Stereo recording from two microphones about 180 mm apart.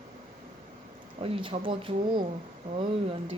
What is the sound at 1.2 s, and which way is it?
Speech, 30° right (ahead or behind).